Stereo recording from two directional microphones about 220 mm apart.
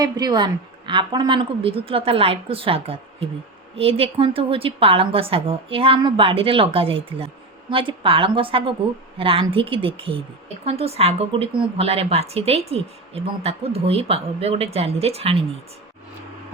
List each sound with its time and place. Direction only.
0.0 s a woman's voice: 20° right (ahead or behind)